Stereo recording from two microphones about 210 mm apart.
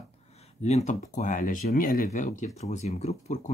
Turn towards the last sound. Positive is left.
turn(degrees=35)  # may be behind; listen again after turning